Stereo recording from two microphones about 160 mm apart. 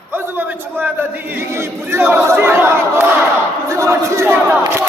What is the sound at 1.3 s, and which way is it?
Crowd, 15° right (ahead or behind).